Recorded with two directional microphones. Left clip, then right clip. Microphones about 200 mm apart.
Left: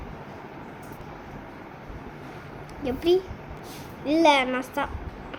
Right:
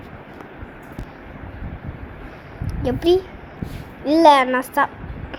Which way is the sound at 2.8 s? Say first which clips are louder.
Right 5 dB; 20° right (ahead or behind).